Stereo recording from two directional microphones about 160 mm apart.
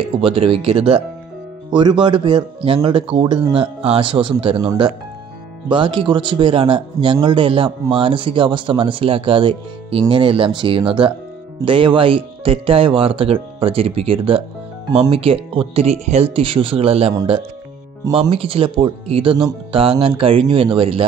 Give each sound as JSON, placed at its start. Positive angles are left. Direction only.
{"t": 0.2, "sound": "speech", "side_deg": -35}
{"t": 18.1, "sound": "speech", "side_deg": -35}